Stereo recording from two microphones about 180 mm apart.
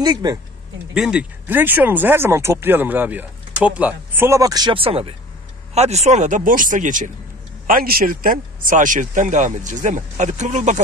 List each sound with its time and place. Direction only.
0.0 s speech: 20° right (ahead or behind)
0.9 s speech: 5° right (ahead or behind); by 10.8 s 40° right (ahead or behind)